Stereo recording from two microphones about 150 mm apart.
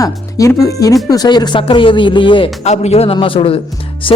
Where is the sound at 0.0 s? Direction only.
20° left (ahead or behind).